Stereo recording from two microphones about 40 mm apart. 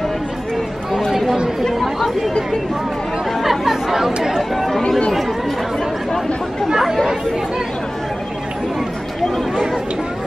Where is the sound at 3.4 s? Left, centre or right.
Centre.